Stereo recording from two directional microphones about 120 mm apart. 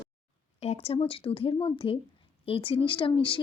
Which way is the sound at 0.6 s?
60° left (ahead or behind).